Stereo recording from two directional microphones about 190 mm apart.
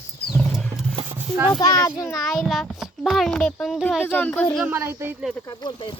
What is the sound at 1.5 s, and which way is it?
Speech, 20° left (ahead or behind).